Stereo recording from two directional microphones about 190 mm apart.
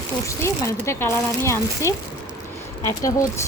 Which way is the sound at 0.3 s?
15° left (ahead or behind).